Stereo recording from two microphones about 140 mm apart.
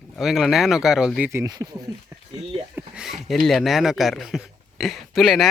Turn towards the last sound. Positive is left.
turn(degrees=0)  # may be behind; listen again after turning